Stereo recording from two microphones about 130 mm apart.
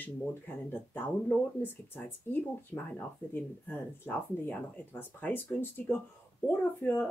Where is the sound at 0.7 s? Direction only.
15° left (ahead or behind).